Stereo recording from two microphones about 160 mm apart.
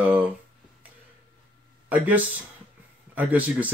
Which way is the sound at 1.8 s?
10° right (ahead or behind).